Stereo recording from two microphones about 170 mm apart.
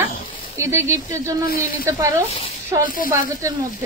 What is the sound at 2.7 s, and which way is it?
Speech, 20° right (ahead or behind).